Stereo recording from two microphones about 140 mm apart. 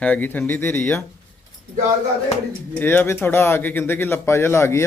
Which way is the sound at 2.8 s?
15° left (ahead or behind).